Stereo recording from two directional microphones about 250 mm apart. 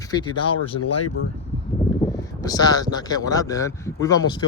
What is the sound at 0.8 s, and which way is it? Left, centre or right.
Speech, left.